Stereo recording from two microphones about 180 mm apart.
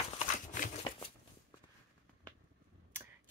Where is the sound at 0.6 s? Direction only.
45° left (ahead or behind).